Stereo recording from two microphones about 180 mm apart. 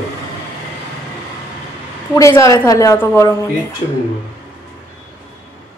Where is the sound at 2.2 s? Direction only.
15° left (ahead or behind).